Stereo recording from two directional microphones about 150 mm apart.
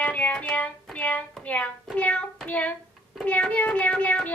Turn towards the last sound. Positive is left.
turn(degrees=10)  # may be behind; listen again after turning